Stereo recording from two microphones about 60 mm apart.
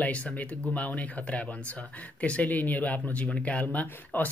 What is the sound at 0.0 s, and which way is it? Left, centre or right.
Speech, left.